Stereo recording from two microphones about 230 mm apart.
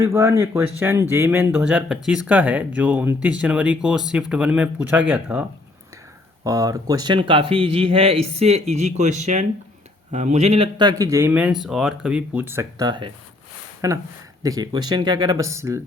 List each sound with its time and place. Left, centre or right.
0.0 s speech: centre